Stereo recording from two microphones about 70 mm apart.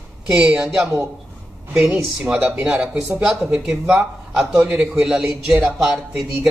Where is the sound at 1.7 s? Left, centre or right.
Centre.